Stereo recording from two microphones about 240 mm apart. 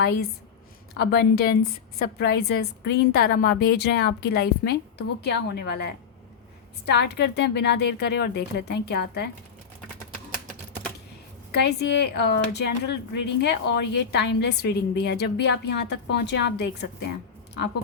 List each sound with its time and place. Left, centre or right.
0.9 s speech: left
11.5 s speech: left